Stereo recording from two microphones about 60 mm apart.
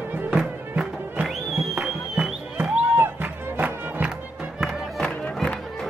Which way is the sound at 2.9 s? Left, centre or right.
Right.